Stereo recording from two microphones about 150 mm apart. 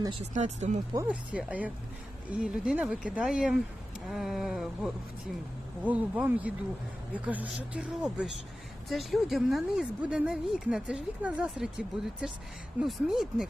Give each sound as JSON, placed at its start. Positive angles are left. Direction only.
{"t": 0.2, "sound": "speech", "side_deg": -50}
{"t": 1.0, "sound": "a woman's voice", "side_deg": -10}